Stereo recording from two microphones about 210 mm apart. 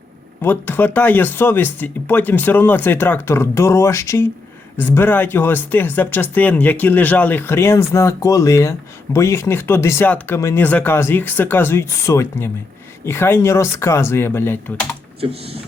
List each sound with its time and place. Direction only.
0.4 s speech: 10° left (ahead or behind)
15.2 s speech: 30° right (ahead or behind)